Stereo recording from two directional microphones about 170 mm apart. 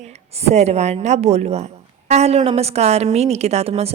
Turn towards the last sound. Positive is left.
turn(degrees=-35)  # may be behind; listen again after turning